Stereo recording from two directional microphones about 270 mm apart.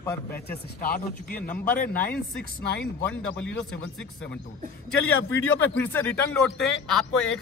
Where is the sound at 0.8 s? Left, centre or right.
Left.